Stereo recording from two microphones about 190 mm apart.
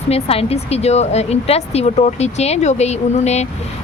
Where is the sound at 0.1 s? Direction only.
30° left (ahead or behind).